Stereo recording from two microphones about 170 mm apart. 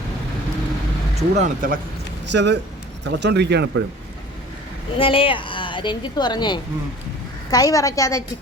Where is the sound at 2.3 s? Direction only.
90° right.